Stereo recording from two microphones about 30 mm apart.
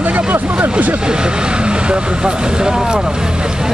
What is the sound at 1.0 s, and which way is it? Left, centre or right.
Speech, right.